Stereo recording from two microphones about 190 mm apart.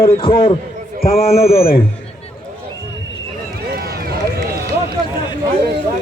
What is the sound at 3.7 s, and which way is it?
Run, 55° right (ahead or behind).